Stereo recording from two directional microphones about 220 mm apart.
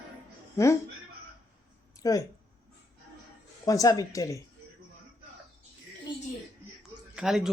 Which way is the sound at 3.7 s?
15° left (ahead or behind).